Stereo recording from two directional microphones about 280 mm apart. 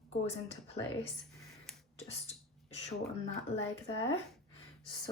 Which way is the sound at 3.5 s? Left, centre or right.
Left.